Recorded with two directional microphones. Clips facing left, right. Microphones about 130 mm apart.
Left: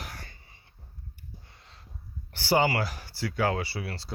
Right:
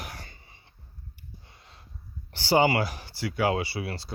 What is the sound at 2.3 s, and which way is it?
Speech, 20° right (ahead or behind).